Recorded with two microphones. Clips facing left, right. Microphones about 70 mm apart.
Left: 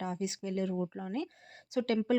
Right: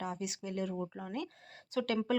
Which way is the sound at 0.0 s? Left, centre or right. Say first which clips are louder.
Left 3 dB; left.